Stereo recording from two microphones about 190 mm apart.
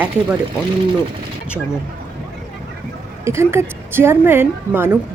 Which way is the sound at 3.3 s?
15° right (ahead or behind).